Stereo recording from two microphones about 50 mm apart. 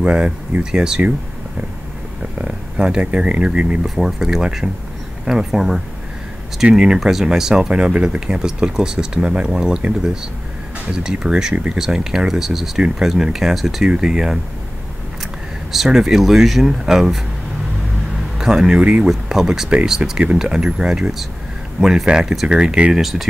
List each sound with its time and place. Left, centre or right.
0.0 s speech: centre
2.3 s speech: right
3.8 s speech: centre
11.5 s speech: right
11.8 s speech: centre
15.7 s speech: centre
18.4 s speech: centre
18.8 s speech: right